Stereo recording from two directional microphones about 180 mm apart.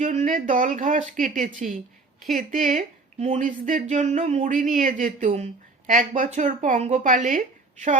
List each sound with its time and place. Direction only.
0.0 s speech: 40° right (ahead or behind)